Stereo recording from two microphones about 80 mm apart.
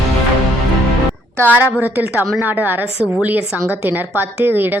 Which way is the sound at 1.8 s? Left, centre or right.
Right.